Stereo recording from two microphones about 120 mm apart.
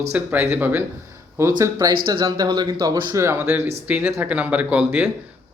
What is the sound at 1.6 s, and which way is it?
Speech, 30° right (ahead or behind).